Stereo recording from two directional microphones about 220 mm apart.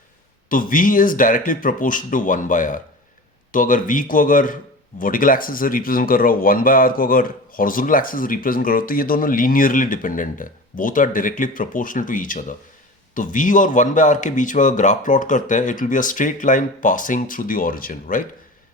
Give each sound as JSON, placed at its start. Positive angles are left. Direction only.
{"t": 0.4, "sound": "speech", "side_deg": 40}